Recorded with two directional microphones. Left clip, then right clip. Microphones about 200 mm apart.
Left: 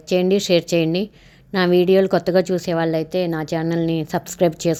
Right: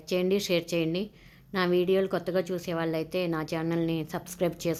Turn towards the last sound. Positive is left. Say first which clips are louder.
# left 11 dB
turn(degrees=25)  # may be behind; listen again after turning